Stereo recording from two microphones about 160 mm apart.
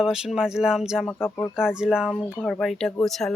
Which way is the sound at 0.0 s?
5° right (ahead or behind).